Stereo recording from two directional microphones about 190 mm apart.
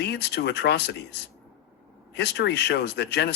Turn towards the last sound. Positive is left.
turn(degrees=60)  # may be behind; listen again after turning